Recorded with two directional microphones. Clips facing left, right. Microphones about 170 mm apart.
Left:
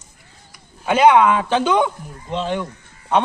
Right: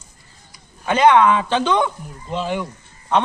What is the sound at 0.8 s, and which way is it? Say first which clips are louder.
Speech: left 1 dB; 10° left (ahead or behind).